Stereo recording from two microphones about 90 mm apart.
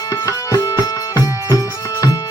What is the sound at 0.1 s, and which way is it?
Music, 40° left (ahead or behind).